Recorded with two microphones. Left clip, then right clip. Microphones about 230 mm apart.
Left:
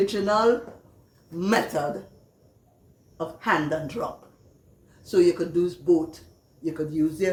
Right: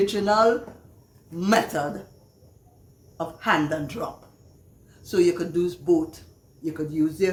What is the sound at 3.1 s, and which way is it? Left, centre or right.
Speech, right.